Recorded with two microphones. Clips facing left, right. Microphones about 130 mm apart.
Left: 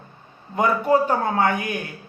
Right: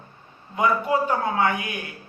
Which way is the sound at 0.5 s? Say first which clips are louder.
Left 3 dB; 40° left (ahead or behind).